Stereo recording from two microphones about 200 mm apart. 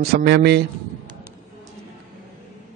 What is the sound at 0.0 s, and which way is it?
Speech, 50° right (ahead or behind).